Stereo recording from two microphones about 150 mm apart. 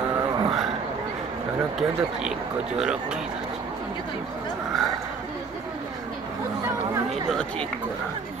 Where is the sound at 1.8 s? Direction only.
5° right (ahead or behind).